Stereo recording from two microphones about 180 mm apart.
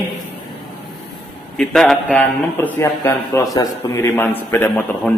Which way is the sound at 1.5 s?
5° left (ahead or behind).